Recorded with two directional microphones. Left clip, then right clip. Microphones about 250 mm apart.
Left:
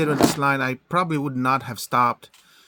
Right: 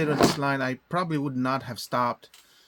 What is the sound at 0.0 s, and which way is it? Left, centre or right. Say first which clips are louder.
Speech: left 3 dB; left.